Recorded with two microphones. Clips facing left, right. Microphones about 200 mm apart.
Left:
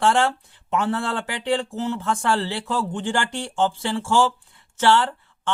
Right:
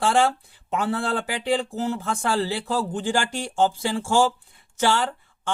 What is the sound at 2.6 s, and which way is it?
Speech, 40° right (ahead or behind).